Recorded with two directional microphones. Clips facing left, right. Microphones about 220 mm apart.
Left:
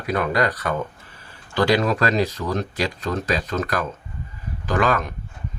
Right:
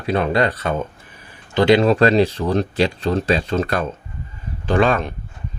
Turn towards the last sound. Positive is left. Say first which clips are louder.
# right 4 dB
turn(degrees=-30)  # may be behind; listen again after turning